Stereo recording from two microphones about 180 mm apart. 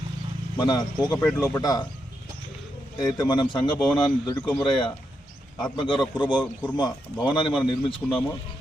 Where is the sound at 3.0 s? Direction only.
20° left (ahead or behind).